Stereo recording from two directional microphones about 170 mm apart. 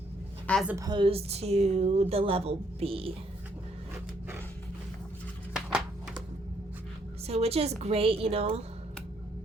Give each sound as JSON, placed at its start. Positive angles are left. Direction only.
{"t": 0.5, "sound": "a woman's voice", "side_deg": 10}
{"t": 0.9, "sound": "a woman's voice", "side_deg": -30}
{"t": 7.3, "sound": "a woman's voice", "side_deg": -35}